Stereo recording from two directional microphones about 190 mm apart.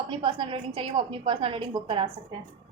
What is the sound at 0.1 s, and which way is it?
A woman's voice, 25° right (ahead or behind).